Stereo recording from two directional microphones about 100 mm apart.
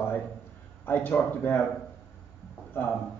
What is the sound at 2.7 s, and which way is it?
Speech, 20° left (ahead or behind).